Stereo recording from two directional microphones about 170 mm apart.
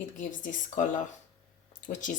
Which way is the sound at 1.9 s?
45° left (ahead or behind).